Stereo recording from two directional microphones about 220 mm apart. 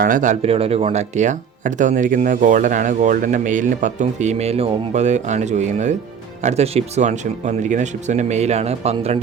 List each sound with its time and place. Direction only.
0.0 s speech: 35° right (ahead or behind)